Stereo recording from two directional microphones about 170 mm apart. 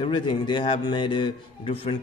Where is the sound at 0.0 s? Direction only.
30° left (ahead or behind).